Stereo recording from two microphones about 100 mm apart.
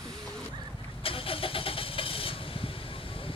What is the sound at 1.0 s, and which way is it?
Vehicle, 65° left (ahead or behind).